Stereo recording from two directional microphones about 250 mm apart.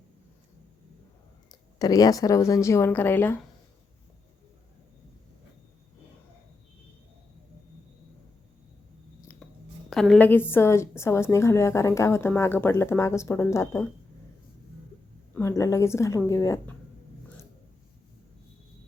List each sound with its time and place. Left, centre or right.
1.5 s a woman's voice: centre
9.9 s a woman's voice: centre
15.3 s a woman's voice: centre